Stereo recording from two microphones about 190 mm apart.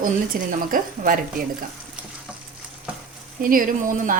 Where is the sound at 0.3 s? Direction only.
50° right (ahead or behind).